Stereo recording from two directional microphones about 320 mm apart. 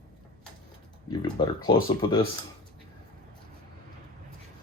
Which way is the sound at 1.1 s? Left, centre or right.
Centre.